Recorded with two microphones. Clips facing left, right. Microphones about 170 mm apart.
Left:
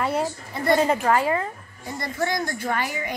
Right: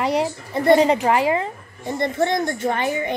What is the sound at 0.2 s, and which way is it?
A child's voice, 20° right (ahead or behind).